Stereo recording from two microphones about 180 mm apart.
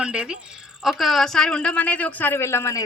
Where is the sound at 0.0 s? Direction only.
5° right (ahead or behind).